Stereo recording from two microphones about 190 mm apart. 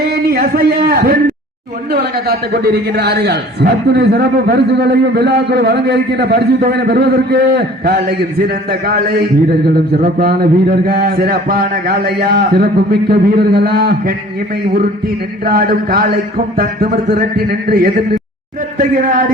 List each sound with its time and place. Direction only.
0.1 s a man's voice: 50° right (ahead or behind)